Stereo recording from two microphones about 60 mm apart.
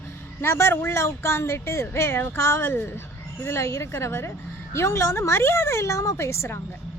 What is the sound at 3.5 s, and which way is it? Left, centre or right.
Speech, left.